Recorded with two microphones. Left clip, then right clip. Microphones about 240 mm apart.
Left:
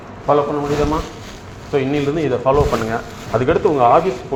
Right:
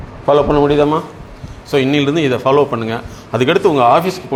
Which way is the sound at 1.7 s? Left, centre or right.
Right.